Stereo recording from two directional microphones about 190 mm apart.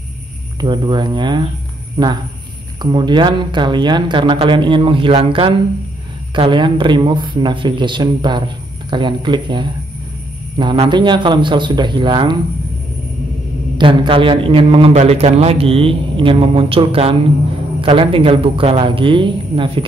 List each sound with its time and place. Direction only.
0.6 s a man's voice: 25° right (ahead or behind)
2.8 s a man's voice: 25° right (ahead or behind)
13.7 s a man's voice: 25° right (ahead or behind)